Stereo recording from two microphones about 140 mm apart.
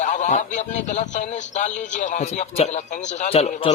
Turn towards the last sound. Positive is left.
turn(degrees=50)  # may be behind; listen again after turning